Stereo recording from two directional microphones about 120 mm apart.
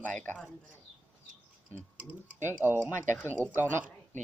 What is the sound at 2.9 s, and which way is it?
Speech, 15° left (ahead or behind).